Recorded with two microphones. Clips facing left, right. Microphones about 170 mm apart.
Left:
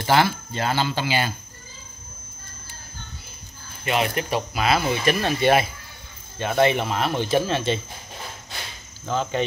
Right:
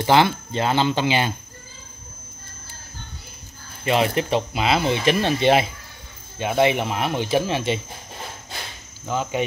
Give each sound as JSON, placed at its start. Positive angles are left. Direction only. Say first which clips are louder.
{"t": 0.0, "sound": "speech", "louder": "right 3 dB", "side_deg": -20}
{"t": 3.8, "sound": "speech", "louder": "right 3 dB", "side_deg": -30}
{"t": 9.0, "sound": "speech", "louder": "even", "side_deg": -10}